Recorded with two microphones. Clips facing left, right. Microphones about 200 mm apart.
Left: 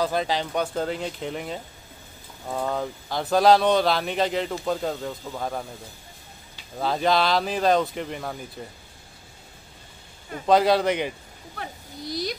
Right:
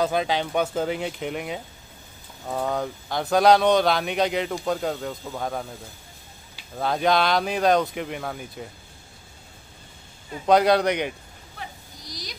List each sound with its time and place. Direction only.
0.0 s speech: centre (ahead or behind)
6.8 s speech: centre (ahead or behind)
10.4 s speech: centre (ahead or behind)
11.5 s a sound: 55° left (ahead or behind)